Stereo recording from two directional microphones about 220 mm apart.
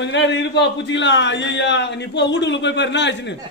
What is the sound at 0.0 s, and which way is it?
A man's voice, 55° left (ahead or behind).